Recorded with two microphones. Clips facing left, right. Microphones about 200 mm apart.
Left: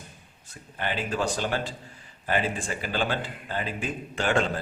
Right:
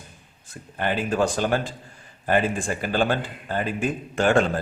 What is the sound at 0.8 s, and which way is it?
A man's voice, 50° right (ahead or behind).